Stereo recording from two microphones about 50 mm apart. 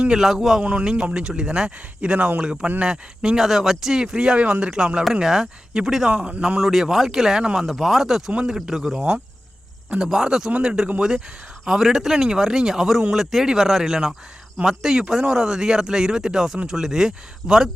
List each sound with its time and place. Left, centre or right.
0.1 s speech: centre
0.6 s speech: right
1.1 s speech: centre
3.3 s speech: centre
4.4 s speech: right; by 6.1 s centre
6.1 s speech: right
6.6 s speech: centre
7.7 s speech: centre; by 9.2 s right
10.0 s speech: centre